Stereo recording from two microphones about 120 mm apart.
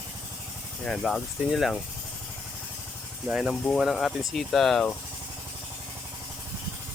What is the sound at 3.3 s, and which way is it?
Speech, 5° right (ahead or behind).